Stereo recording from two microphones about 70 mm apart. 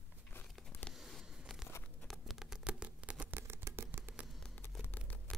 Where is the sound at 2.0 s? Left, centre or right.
Centre.